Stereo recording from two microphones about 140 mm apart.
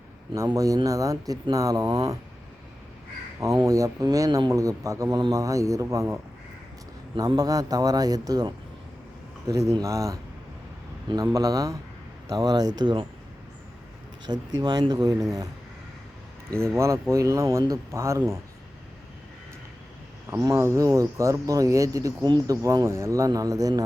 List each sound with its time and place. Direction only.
0.3 s speech: 25° right (ahead or behind)
3.4 s speech: 25° right (ahead or behind)
7.2 s speech: 25° right (ahead or behind)
14.3 s speech: 30° right (ahead or behind)
16.6 s speech: 20° right (ahead or behind)
20.4 s speech: 20° right (ahead or behind)